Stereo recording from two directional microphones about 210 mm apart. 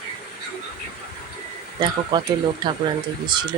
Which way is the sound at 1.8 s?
20° right (ahead or behind).